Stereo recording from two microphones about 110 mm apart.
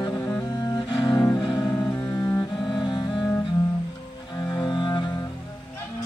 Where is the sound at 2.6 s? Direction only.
45° left (ahead or behind).